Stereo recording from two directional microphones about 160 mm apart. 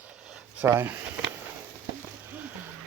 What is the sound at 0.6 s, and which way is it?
Speech, 15° right (ahead or behind).